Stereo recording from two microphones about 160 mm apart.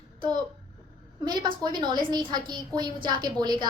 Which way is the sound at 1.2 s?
25° right (ahead or behind).